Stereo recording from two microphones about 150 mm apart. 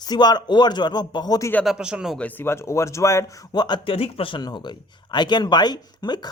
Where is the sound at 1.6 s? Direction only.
5° right (ahead or behind).